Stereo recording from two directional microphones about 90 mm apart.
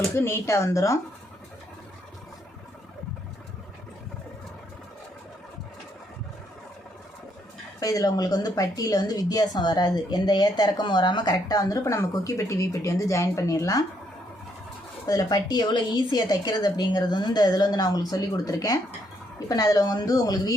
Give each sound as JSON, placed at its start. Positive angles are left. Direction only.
{"t": 0.1, "sound": "speech", "side_deg": 25}
{"t": 7.8, "sound": "a woman's voice", "side_deg": 40}
{"t": 15.0, "sound": "a woman's voice", "side_deg": 45}